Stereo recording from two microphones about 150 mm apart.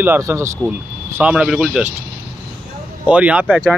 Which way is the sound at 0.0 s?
15° right (ahead or behind).